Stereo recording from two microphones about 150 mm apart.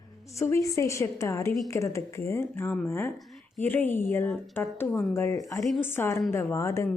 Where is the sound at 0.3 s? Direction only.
20° left (ahead or behind).